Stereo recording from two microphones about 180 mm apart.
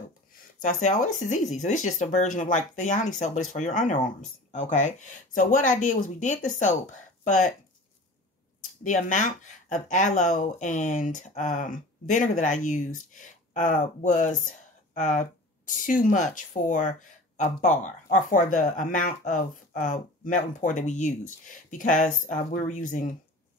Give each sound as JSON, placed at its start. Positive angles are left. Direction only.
{"t": 0.6, "sound": "speech", "side_deg": 45}
{"t": 8.8, "sound": "speech", "side_deg": 45}